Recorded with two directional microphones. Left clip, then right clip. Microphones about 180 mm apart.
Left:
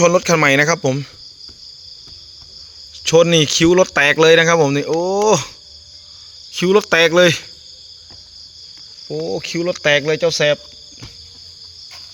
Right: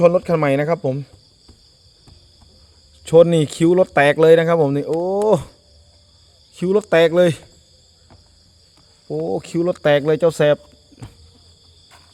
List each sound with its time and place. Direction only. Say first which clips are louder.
0.0 s speech: left 2 dB; centre (ahead or behind)
3.0 s speech: even; 15° right (ahead or behind)
4.9 s speech: left 2 dB; centre (ahead or behind)
5.2 s speech: left 2 dB; 15° right (ahead or behind)
6.5 s speech: left 2 dB; 5° right (ahead or behind)
9.1 s speech: even; 30° right (ahead or behind)